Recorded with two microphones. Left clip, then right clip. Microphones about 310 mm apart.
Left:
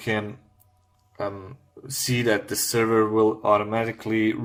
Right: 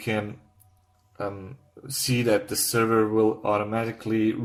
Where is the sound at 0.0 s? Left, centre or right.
Left.